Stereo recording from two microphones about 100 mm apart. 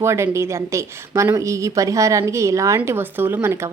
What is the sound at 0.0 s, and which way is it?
A woman's voice, 30° right (ahead or behind).